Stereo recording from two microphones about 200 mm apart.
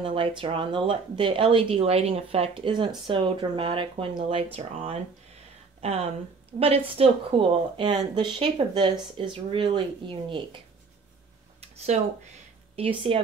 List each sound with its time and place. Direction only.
0.0 s speech: 25° right (ahead or behind)
11.6 s a sound: 35° right (ahead or behind)
12.7 s speech: 25° right (ahead or behind)